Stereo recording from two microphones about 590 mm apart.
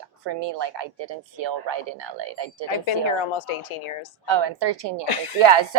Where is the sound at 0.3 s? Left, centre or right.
Right.